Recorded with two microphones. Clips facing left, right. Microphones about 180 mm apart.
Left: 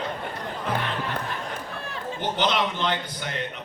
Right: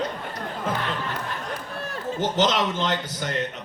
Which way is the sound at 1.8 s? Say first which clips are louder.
Right 4 dB; 40° right (ahead or behind).